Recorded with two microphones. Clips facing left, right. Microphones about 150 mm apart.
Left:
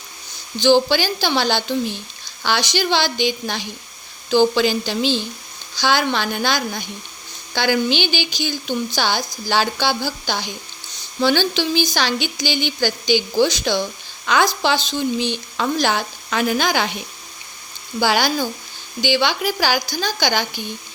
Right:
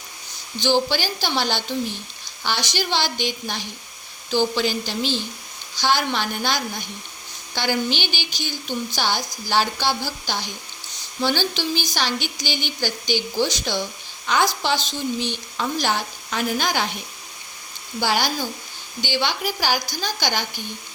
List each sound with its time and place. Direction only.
0.6 s a woman's voice: 90° left
18.0 s a woman's voice: 90° left